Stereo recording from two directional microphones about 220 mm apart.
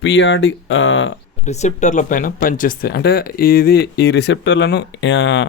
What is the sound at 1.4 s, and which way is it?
Speech, 30° left (ahead or behind).